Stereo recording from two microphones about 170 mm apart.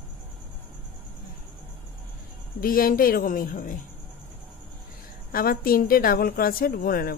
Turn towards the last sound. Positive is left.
turn(degrees=60)  # may be behind; listen again after turning